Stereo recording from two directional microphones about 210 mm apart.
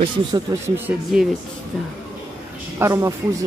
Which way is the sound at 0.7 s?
10° right (ahead or behind).